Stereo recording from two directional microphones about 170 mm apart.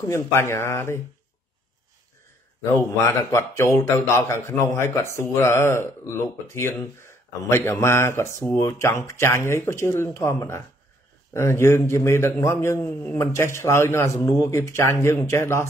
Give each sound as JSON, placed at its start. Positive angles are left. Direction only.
{"t": 0.0, "sound": "a man's voice", "side_deg": 15}
{"t": 3.3, "sound": "a man's voice", "side_deg": 15}